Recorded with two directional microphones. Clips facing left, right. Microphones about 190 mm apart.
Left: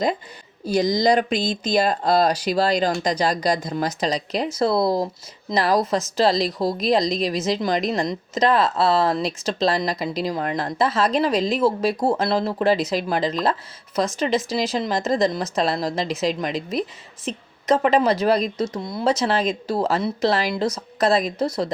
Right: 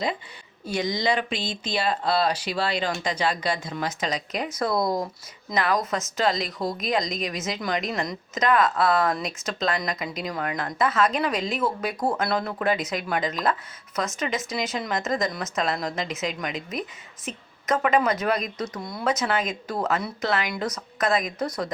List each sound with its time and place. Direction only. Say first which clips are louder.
0.6 s a woman's voice: left 7 dB; 35° left (ahead or behind)